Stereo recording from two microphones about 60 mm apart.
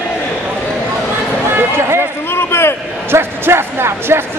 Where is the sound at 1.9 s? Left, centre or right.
Left.